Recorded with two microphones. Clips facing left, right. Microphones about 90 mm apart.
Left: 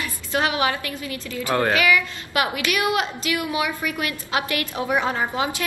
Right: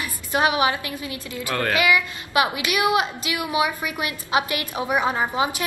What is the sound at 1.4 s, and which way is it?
Speech, 20° left (ahead or behind).